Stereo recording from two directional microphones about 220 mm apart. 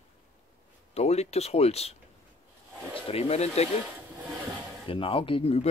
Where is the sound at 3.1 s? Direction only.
30° left (ahead or behind).